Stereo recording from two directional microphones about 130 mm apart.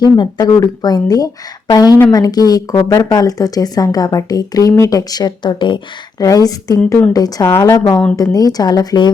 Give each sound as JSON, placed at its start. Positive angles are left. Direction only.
{"t": 0.0, "sound": "speech", "side_deg": 30}